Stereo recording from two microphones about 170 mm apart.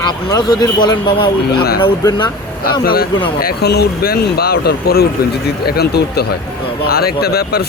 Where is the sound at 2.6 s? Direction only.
60° left (ahead or behind).